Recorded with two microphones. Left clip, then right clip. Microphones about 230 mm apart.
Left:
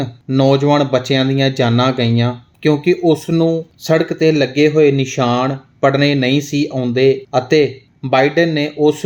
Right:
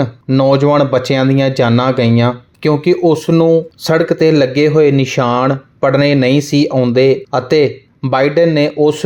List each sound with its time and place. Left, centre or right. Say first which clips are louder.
0.0 s speech: right 3 dB; centre